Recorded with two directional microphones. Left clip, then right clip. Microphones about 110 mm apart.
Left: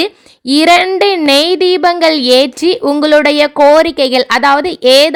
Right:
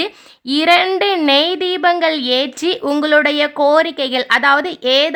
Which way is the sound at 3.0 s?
40° left (ahead or behind).